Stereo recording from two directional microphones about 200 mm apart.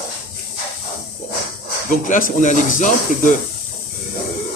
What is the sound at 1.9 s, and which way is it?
Speech, 40° left (ahead or behind).